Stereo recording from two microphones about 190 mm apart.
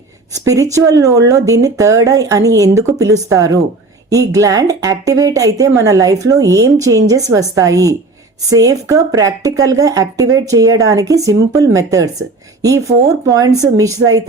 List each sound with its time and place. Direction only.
0.3 s speech: 20° right (ahead or behind)